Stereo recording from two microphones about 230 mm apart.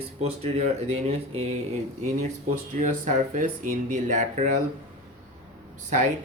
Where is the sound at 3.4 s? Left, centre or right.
Right.